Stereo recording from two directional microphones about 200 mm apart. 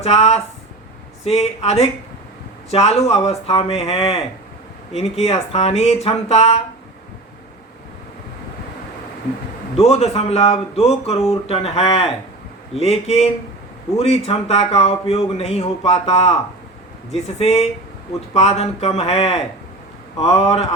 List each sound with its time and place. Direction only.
0.0 s speech: 30° left (ahead or behind)
9.7 s speech: 30° left (ahead or behind)
17.4 s speech: 30° left (ahead or behind)